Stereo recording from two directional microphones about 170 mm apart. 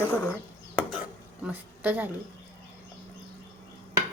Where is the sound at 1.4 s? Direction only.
10° right (ahead or behind).